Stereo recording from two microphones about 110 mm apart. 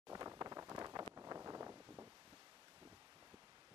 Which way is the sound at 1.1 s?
30° right (ahead or behind).